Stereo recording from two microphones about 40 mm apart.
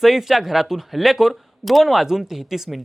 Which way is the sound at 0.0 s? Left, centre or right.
Centre.